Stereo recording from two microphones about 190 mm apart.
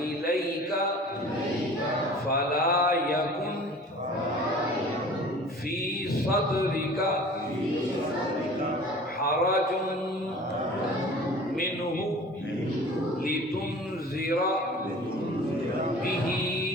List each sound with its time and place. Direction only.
2.3 s mantra: 50° left (ahead or behind)
6.3 s mantra: 50° left (ahead or behind)
9.2 s a sound: 50° left (ahead or behind)